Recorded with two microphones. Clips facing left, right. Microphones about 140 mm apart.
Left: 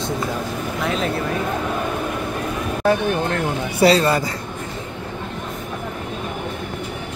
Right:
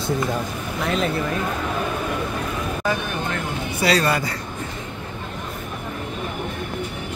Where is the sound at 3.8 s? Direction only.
25° left (ahead or behind).